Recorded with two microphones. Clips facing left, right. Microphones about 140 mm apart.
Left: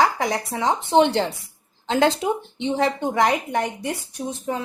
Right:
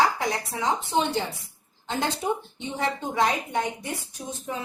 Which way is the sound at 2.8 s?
70° left (ahead or behind).